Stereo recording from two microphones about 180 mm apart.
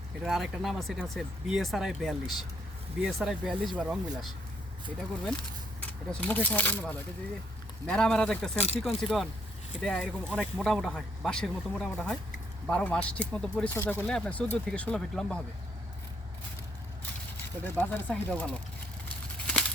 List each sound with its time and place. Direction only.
0.2 s speech: centre (ahead or behind)
5.8 s speech: 10° left (ahead or behind)
8.5 s speech: 35° left (ahead or behind)
9.0 s speech: centre (ahead or behind)
17.3 s speech: 10° left (ahead or behind)
19.0 s a sound: 5° left (ahead or behind)